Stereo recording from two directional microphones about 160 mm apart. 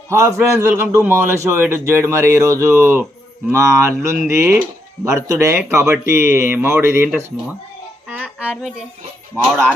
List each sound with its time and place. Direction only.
0.1 s a man's voice: 15° right (ahead or behind)
8.0 s music: 10° right (ahead or behind)
9.3 s speech: centre (ahead or behind)